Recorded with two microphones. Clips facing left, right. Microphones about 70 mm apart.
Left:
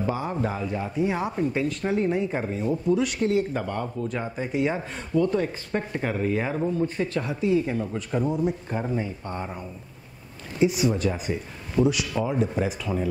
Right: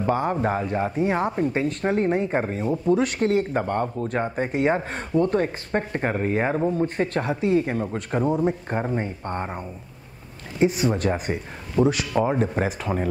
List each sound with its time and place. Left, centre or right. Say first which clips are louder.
0.1 s speech: right 5 dB; right
1.3 s speech: right 2 dB; right